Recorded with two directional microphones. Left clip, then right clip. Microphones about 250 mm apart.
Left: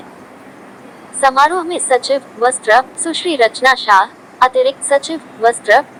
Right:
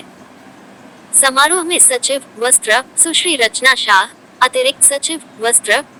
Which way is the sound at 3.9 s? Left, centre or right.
Right.